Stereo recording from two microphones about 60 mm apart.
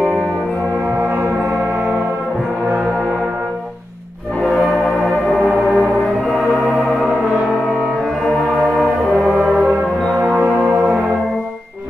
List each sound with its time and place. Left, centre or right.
0.9 s gong: right
1.3 s a sound: centre
4.5 s church bell: centre
5.8 s music: centre
9.2 s brass instrument: centre